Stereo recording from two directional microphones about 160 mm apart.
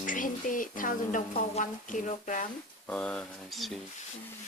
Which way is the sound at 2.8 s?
5° left (ahead or behind).